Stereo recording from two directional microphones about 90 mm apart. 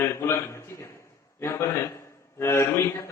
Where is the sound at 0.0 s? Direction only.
30° left (ahead or behind).